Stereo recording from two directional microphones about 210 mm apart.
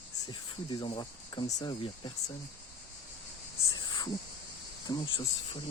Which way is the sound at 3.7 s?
20° left (ahead or behind).